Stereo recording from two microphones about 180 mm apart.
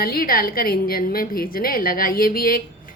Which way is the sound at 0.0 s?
55° left (ahead or behind).